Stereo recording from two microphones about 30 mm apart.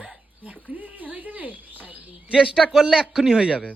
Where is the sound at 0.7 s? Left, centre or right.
Right.